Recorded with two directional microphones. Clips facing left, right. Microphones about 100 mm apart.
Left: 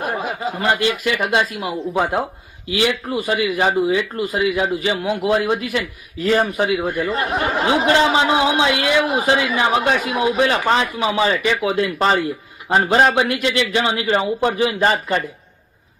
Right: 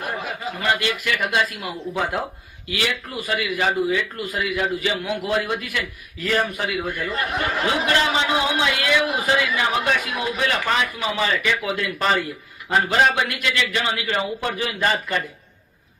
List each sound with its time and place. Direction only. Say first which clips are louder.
0.0 s a man's voice: left 5 dB; 35° left (ahead or behind)
6.2 s a man's voice: left 6 dB; 30° left (ahead or behind)